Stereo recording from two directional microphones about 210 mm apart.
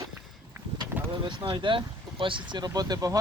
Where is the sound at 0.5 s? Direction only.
10° right (ahead or behind).